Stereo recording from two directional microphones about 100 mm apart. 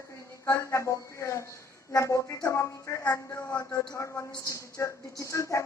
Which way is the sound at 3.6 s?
35° left (ahead or behind).